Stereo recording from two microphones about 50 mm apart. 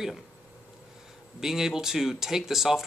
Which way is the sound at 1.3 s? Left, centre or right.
Centre.